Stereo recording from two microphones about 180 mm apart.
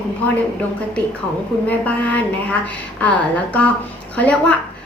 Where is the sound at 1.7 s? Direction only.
10° left (ahead or behind).